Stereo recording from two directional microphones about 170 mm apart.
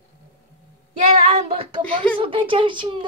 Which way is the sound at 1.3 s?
35° right (ahead or behind).